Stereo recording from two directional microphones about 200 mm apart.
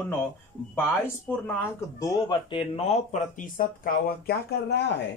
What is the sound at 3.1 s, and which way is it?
Speech, 40° left (ahead or behind).